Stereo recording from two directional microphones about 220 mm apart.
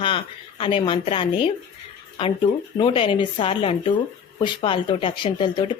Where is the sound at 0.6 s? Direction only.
25° left (ahead or behind).